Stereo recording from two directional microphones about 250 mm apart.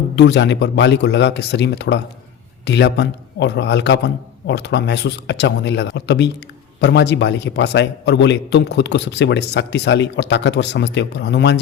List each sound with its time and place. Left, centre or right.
0.2 s a man's voice: left